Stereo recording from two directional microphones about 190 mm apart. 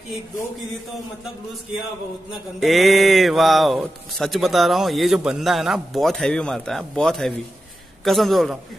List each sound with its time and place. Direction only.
2.6 s speech: centre (ahead or behind)